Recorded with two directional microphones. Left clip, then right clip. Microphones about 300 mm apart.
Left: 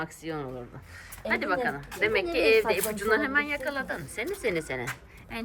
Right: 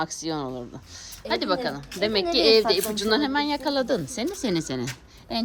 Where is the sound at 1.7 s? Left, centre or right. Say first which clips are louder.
Right 1 dB; centre.